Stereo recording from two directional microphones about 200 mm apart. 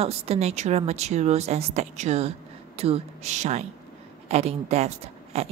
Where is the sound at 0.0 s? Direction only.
30° right (ahead or behind).